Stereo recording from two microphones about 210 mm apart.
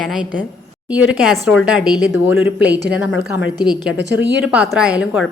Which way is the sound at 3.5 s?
20° left (ahead or behind).